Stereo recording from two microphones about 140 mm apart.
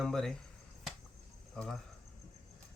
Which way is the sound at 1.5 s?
5° left (ahead or behind).